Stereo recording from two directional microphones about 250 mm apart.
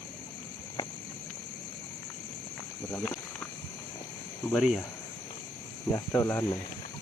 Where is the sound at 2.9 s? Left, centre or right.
Centre.